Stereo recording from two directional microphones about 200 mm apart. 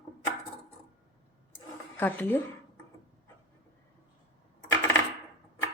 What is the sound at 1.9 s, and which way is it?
Speech, 10° left (ahead or behind).